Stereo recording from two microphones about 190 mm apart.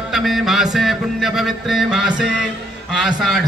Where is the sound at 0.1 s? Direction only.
Centre (ahead or behind).